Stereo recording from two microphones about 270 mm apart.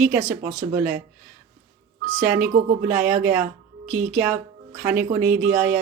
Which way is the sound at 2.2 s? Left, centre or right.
Centre.